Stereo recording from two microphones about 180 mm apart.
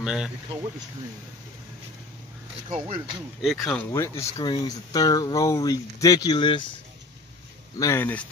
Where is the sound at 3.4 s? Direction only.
Centre (ahead or behind); by 6.6 s 25° left (ahead or behind).